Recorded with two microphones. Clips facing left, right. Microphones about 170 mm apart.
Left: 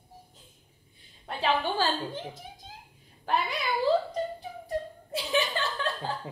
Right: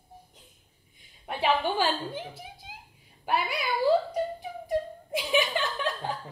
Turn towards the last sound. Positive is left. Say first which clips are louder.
# right 1 dB
turn(degrees=-15)  # may be behind; listen again after turning